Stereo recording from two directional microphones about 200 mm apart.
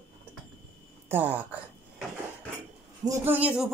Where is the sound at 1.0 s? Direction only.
10° right (ahead or behind).